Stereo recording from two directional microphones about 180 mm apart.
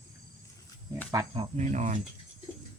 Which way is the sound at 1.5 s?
40° right (ahead or behind).